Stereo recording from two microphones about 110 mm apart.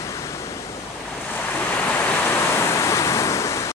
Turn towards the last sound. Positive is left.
turn(degrees=25)  # may be behind; listen again after turning